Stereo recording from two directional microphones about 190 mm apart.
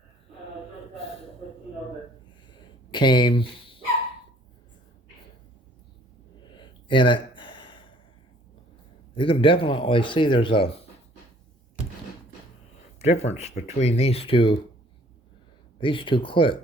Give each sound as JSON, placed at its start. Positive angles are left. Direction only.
{"t": 2.9, "sound": "speech", "side_deg": 25}
{"t": 6.5, "sound": "a sound", "side_deg": 25}
{"t": 9.1, "sound": "speech", "side_deg": 30}
{"t": 13.0, "sound": "speech", "side_deg": 35}
{"t": 15.8, "sound": "speech", "side_deg": 25}